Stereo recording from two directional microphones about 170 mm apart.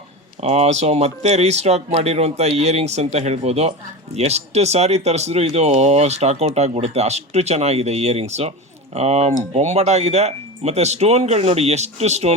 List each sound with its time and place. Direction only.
0.4 s speech: 40° right (ahead or behind)